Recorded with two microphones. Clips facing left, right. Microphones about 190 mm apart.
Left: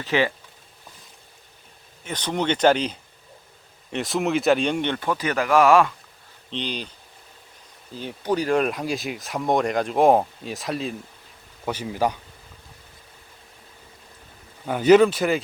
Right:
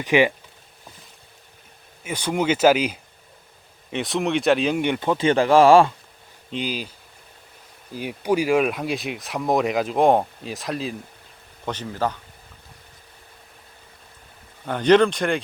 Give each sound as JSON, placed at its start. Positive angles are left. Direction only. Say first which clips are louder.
{"t": 0.0, "sound": "speech", "louder": "right 4 dB", "side_deg": -15}
{"t": 2.0, "sound": "speech", "louder": "right 2 dB", "side_deg": -10}
{"t": 4.9, "sound": "speech", "louder": "right 5 dB", "side_deg": -25}
{"t": 6.5, "sound": "speech", "louder": "right 2 dB", "side_deg": -5}
{"t": 7.9, "sound": "speech", "louder": "right 3 dB", "side_deg": -10}
{"t": 14.7, "sound": "speech", "louder": "left 1 dB", "side_deg": 5}